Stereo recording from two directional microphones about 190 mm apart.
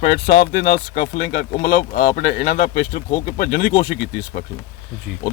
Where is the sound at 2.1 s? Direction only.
55° left (ahead or behind).